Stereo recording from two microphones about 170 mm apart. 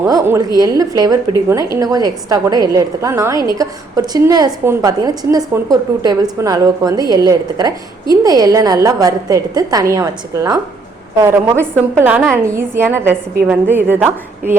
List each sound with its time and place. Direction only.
0.0 s a woman's voice: 15° right (ahead or behind)